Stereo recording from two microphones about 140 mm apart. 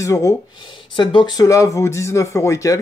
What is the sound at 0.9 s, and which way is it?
Speech, 35° left (ahead or behind).